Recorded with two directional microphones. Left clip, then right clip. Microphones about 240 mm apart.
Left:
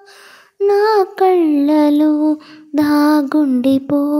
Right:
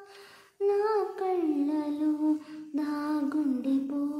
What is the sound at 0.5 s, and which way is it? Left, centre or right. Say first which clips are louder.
Child singing: left 14 dB; left.